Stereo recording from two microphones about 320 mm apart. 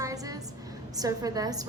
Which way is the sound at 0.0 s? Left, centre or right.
Centre.